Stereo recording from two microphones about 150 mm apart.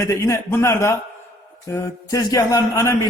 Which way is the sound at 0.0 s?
20° left (ahead or behind).